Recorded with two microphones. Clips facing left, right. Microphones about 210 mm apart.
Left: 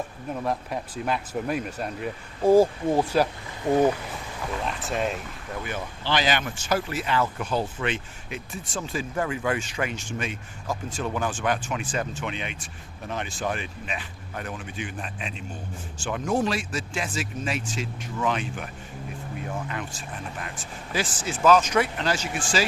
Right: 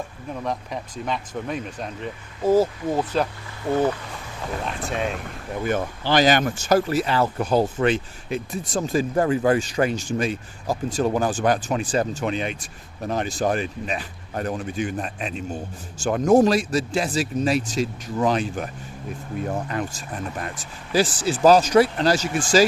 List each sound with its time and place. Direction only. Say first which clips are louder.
0.4 s speech: even; 5° left (ahead or behind)
4.6 s speech: right 1 dB; centre (ahead or behind)
5.6 s speech: right 9 dB; 45° right (ahead or behind)